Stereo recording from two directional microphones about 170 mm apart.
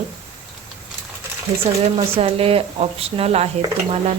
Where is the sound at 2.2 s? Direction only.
35° right (ahead or behind).